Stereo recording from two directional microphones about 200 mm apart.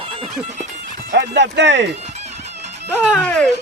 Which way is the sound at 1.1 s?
60° right (ahead or behind).